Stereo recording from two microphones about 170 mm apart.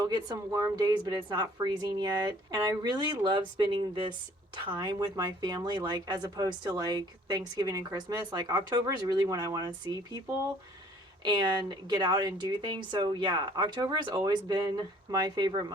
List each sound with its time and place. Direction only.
0.1 s speech: 20° right (ahead or behind)
11.2 s speech: 25° right (ahead or behind)